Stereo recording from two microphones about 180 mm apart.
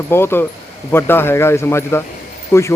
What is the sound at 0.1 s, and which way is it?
Speech, 15° left (ahead or behind).